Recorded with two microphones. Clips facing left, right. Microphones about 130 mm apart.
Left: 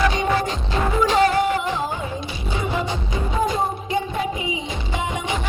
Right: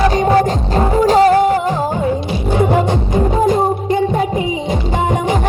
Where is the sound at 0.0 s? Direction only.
40° right (ahead or behind).